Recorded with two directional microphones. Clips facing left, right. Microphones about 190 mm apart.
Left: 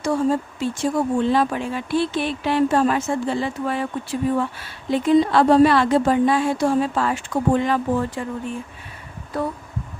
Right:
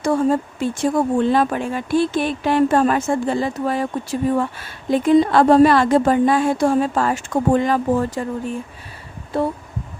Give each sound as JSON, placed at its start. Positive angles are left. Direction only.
{"t": 0.0, "sound": "speech", "side_deg": -55}
{"t": 9.3, "sound": "speech", "side_deg": -25}